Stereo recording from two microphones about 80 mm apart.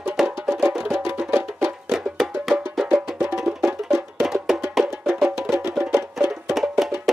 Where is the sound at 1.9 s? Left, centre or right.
Centre.